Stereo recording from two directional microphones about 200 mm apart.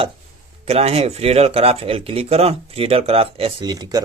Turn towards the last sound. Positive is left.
turn(degrees=-20)  # may be behind; listen again after turning